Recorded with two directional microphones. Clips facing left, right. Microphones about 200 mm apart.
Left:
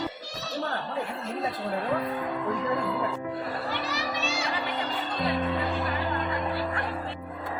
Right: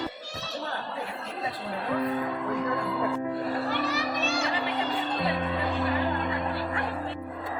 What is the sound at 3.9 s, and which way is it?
Music, 55° right (ahead or behind).